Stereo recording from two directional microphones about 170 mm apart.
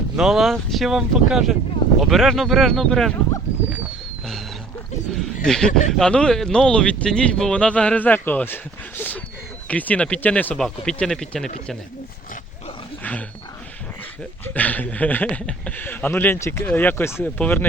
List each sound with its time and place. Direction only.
0.2 s speech: centre (ahead or behind)
5.1 s a man's voice: 5° left (ahead or behind)
13.0 s wild animals: 10° left (ahead or behind)
14.4 s a man's voice: 10° left (ahead or behind)